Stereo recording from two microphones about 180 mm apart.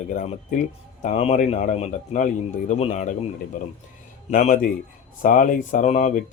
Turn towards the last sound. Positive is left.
turn(degrees=40)  # may be behind; listen again after turning